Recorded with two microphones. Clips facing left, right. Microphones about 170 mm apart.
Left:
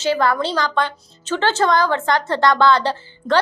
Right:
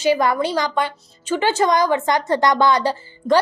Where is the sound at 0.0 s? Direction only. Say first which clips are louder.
Right 1 dB; 15° right (ahead or behind).